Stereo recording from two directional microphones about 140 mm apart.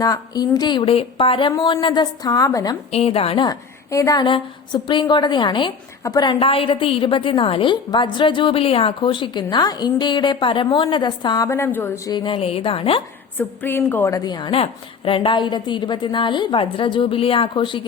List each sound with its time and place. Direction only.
0.0 s a woman's voice: 25° left (ahead or behind)
2.9 s a woman's voice: 45° left (ahead or behind)
3.4 s a woman's voice: 25° left (ahead or behind)
11.4 s a woman's voice: 20° left (ahead or behind)
12.1 s a woman's voice: 35° left (ahead or behind)
13.3 s a woman's voice: 15° left (ahead or behind); by 17.8 s 35° left (ahead or behind)